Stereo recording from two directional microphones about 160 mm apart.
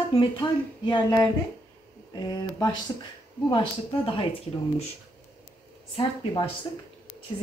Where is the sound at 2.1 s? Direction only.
25° left (ahead or behind).